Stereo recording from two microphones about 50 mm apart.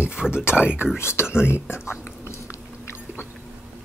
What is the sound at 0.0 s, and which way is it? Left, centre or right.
Speech, centre.